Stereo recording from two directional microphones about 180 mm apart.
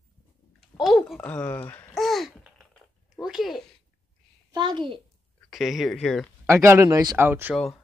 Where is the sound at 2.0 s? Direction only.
Centre (ahead or behind).